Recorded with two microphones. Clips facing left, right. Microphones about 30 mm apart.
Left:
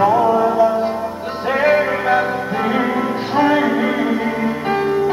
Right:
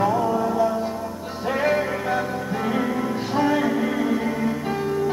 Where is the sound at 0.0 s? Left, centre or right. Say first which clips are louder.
Left 7 dB; left.